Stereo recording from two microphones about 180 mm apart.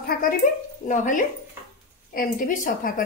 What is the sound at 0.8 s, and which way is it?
A woman's voice, 45° left (ahead or behind).